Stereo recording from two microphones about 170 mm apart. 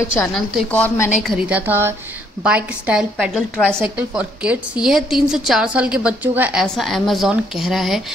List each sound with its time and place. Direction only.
0.3 s a woman's voice: 5° left (ahead or behind)
1.2 s a woman's voice: 5° right (ahead or behind)
6.6 s a woman's voice: centre (ahead or behind)